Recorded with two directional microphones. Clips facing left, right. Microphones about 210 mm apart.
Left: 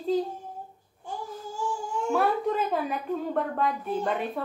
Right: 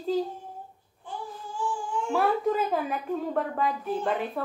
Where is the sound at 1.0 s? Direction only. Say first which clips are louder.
Left 2 dB; 40° left (ahead or behind).